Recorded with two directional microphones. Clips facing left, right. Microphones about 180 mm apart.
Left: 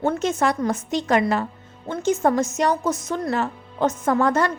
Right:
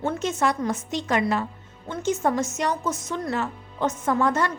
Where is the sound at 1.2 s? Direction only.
55° left (ahead or behind).